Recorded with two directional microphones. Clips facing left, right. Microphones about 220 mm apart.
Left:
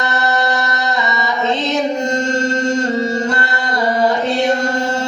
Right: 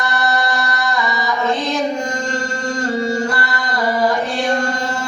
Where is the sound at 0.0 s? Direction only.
20° left (ahead or behind).